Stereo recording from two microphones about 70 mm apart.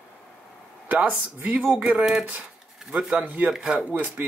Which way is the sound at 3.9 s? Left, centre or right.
Right.